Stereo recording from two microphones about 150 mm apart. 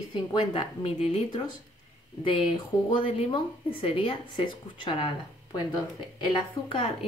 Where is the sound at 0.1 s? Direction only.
30° left (ahead or behind).